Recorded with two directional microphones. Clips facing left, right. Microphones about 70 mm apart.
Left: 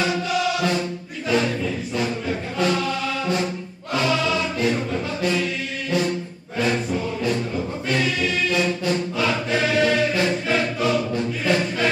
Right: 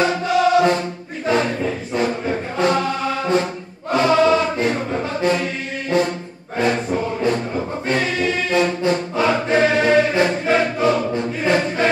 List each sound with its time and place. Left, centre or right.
0.0 s music: right
1.2 s chant: right
3.9 s music: right